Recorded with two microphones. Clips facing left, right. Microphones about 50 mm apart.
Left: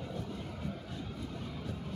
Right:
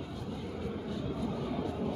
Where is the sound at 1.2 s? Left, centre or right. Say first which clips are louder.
Right 8 dB; right.